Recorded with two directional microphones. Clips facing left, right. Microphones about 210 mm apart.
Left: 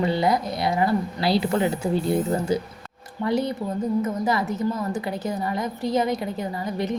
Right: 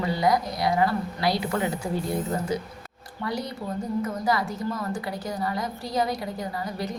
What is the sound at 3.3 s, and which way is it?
A woman's voice, 25° left (ahead or behind).